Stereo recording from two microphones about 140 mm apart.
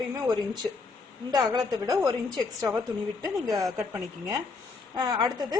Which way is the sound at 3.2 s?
25° right (ahead or behind).